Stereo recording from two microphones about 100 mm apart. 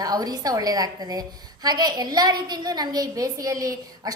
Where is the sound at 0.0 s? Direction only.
40° right (ahead or behind).